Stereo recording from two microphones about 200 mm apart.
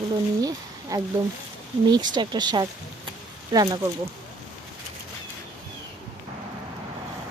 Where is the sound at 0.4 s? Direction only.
15° right (ahead or behind).